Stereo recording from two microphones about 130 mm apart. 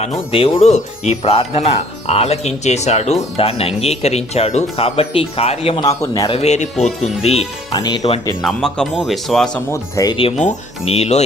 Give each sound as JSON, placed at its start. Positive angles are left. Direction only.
{"t": 0.3, "sound": "speech", "side_deg": 45}
{"t": 3.3, "sound": "speech", "side_deg": 50}
{"t": 5.8, "sound": "speech", "side_deg": 25}
{"t": 6.2, "sound": "speech", "side_deg": 50}
{"t": 7.7, "sound": "speech", "side_deg": 30}
{"t": 8.4, "sound": "speech", "side_deg": 0}
{"t": 9.6, "sound": "speech", "side_deg": 25}
{"t": 10.3, "sound": "speech", "side_deg": 60}